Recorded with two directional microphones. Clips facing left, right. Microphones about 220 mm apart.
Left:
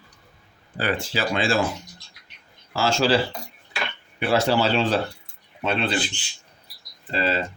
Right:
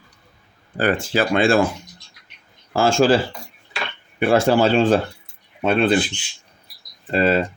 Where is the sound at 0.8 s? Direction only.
50° right (ahead or behind).